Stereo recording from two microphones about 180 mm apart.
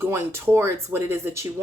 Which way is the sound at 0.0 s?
15° right (ahead or behind).